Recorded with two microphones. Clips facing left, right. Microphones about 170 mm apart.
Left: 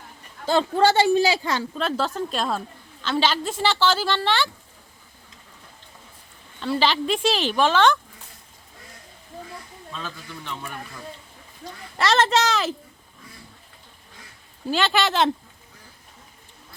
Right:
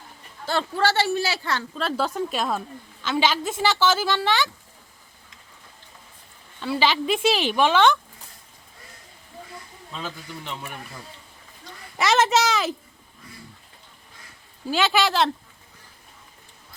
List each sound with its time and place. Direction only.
0.4 s speech: 15° left (ahead or behind)
1.8 s a woman's voice: 10° right (ahead or behind)
6.6 s a woman's voice: 10° right (ahead or behind)
9.9 s a woman's voice: 15° right (ahead or behind)
11.9 s a woman's voice: 10° right (ahead or behind)
14.7 s speech: 5° right (ahead or behind)